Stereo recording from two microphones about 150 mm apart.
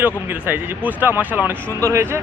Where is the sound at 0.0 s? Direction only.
10° right (ahead or behind).